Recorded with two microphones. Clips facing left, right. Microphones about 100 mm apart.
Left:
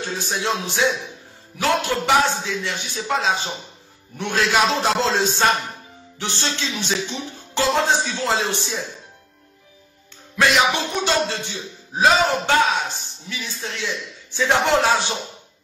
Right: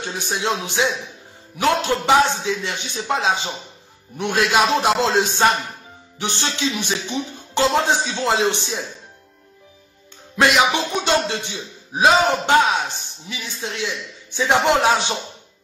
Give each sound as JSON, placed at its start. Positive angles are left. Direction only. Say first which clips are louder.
{"t": 0.0, "sound": "a man's voice", "louder": "right 1 dB", "side_deg": -15}
{"t": 10.3, "sound": "speech", "louder": "right 1 dB", "side_deg": -15}